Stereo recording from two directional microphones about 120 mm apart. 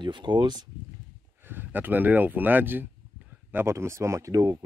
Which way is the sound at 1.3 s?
15° right (ahead or behind).